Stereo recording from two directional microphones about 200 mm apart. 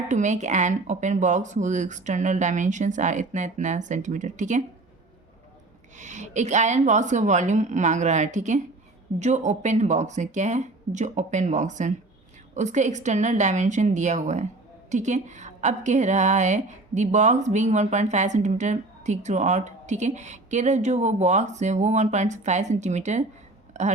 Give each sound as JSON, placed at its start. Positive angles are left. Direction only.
{"t": 0.1, "sound": "a woman's voice", "side_deg": -35}
{"t": 6.0, "sound": "a woman's voice", "side_deg": -35}